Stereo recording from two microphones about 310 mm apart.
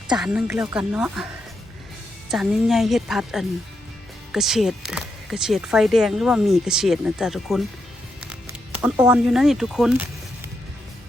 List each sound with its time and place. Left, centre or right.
0.2 s speech: centre
2.3 s speech: centre
8.8 s speech: centre